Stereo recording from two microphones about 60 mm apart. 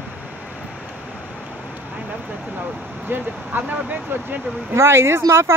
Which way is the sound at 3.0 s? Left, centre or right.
Right.